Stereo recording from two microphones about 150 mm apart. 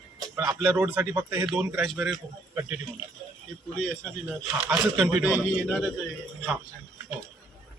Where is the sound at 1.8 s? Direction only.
Centre (ahead or behind).